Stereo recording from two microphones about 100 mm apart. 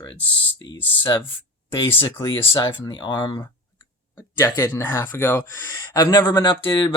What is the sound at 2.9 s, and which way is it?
Speech, 55° left (ahead or behind).